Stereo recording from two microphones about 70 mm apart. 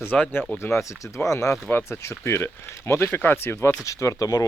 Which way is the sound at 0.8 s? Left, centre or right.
Left.